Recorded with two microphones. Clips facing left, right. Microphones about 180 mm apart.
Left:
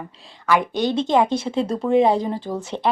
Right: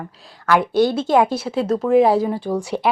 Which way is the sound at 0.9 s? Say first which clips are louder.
Right 1 dB; 5° right (ahead or behind).